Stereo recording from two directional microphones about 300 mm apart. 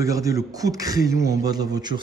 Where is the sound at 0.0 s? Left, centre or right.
Centre.